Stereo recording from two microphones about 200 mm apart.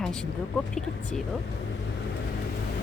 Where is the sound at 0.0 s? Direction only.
5° left (ahead or behind).